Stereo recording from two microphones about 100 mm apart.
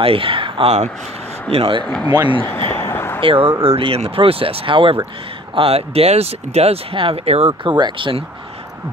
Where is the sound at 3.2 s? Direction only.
65° right (ahead or behind).